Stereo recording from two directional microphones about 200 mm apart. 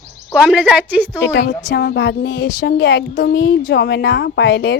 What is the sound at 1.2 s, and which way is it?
Speech, 55° left (ahead or behind).